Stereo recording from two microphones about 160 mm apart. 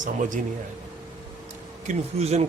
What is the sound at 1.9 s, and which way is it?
Speech, 40° right (ahead or behind).